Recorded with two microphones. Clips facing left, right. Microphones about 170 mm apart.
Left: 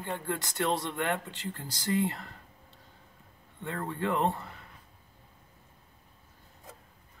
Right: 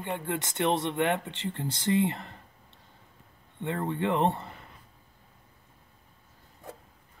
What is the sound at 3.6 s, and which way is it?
Speech, 25° right (ahead or behind).